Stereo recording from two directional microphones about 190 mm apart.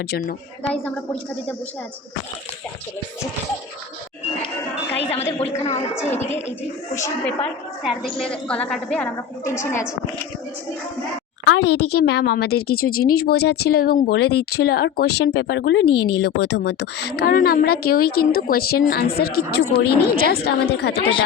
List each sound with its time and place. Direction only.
0.1 s speech: 50° left (ahead or behind)
0.6 s a woman's voice: 5° left (ahead or behind)
5.4 s speech: 35° left (ahead or behind)
7.9 s a woman's voice: 5° left (ahead or behind)
11.4 s a woman's voice: 75° left (ahead or behind); by 21.1 s 60° left (ahead or behind)